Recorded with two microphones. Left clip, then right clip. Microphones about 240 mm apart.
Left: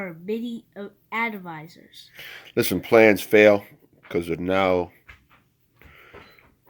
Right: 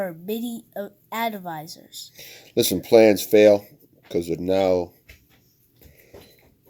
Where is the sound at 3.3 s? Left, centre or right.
Left.